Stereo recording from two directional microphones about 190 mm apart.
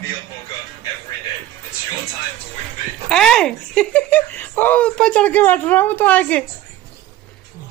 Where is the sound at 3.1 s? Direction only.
5° left (ahead or behind).